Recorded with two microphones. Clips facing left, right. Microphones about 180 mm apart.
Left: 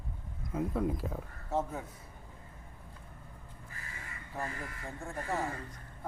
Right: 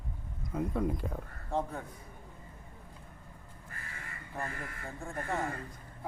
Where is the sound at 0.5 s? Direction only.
Centre (ahead or behind).